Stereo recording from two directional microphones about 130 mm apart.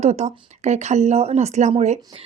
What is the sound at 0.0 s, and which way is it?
A woman's voice, 55° right (ahead or behind).